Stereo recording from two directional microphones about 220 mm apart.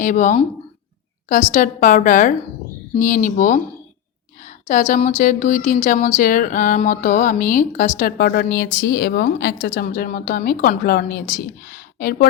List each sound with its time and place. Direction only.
0.0 s speech: 35° left (ahead or behind)